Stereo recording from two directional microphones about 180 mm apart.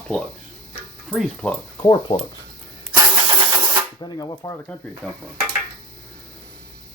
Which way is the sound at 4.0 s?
20° left (ahead or behind).